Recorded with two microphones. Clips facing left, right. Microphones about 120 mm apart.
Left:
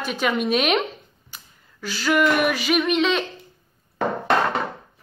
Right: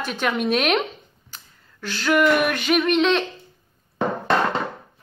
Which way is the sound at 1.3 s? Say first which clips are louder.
Even; 10° left (ahead or behind).